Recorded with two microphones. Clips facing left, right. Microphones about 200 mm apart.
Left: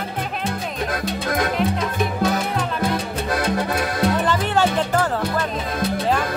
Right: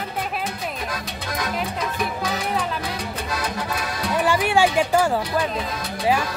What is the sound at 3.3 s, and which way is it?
Music, 55° left (ahead or behind).